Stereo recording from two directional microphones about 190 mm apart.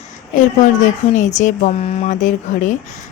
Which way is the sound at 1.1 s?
40° left (ahead or behind).